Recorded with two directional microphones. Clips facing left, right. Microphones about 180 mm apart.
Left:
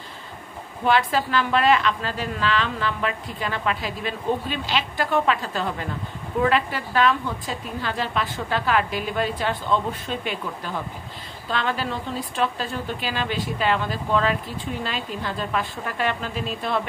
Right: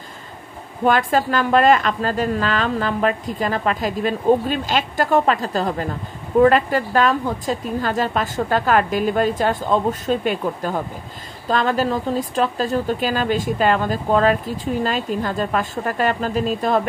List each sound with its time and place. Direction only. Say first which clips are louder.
0.8 s speech: right 4 dB; 45° right (ahead or behind)